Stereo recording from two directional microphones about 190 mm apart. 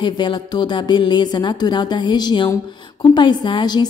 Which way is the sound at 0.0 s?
25° left (ahead or behind).